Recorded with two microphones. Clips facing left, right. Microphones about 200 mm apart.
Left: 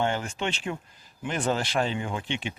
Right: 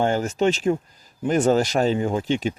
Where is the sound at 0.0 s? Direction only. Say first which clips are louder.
Right 8 dB; 40° right (ahead or behind).